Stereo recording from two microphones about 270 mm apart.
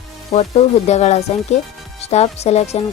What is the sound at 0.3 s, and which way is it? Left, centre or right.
Speech, left.